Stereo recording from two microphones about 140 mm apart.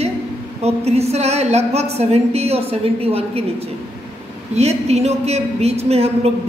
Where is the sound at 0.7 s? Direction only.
50° right (ahead or behind).